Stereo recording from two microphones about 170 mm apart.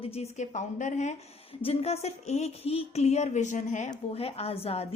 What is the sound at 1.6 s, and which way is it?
A woman's voice, 35° left (ahead or behind).